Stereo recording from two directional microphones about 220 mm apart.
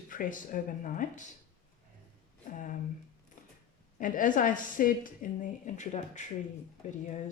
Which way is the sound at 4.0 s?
35° left (ahead or behind).